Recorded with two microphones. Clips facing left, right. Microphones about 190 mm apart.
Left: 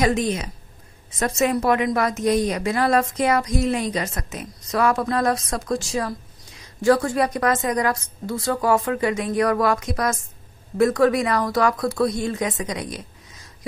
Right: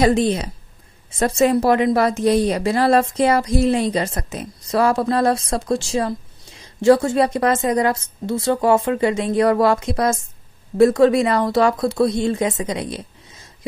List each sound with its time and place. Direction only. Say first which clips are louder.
0.0 s a woman's voice: right 4 dB; 30° right (ahead or behind)